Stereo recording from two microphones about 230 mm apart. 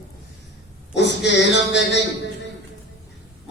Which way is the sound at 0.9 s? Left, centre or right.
Left.